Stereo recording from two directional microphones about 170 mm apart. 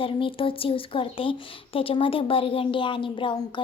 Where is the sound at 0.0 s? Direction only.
30° left (ahead or behind).